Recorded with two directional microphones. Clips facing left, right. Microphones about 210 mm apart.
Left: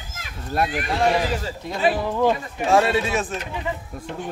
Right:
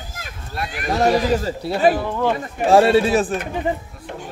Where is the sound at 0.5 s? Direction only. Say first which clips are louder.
Left 6 dB; 50° left (ahead or behind).